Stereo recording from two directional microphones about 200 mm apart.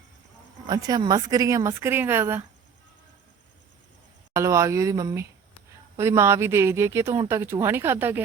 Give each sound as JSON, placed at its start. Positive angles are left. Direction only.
{"t": 0.7, "sound": "speech", "side_deg": -20}
{"t": 4.4, "sound": "speech", "side_deg": -15}